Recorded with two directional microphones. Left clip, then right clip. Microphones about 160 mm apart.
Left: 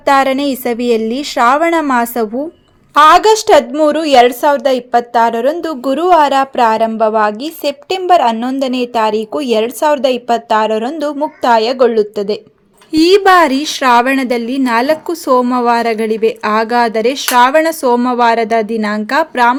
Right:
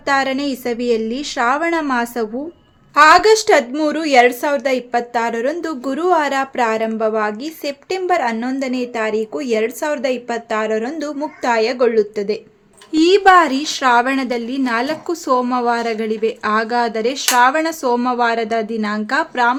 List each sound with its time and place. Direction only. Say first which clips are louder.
0.0 s a woman's voice: left 7 dB; 35° left (ahead or behind)